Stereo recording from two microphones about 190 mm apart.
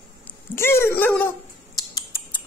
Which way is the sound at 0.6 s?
15° left (ahead or behind).